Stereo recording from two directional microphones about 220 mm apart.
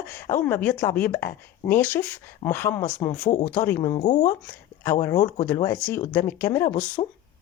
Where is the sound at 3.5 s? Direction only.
10° left (ahead or behind).